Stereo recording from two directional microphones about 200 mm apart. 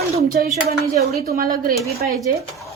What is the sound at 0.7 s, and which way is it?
Speech, 50° right (ahead or behind).